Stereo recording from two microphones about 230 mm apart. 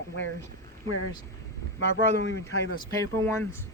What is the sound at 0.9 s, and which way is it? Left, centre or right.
Speech, left.